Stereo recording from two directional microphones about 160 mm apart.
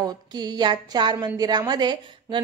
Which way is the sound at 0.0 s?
25° right (ahead or behind).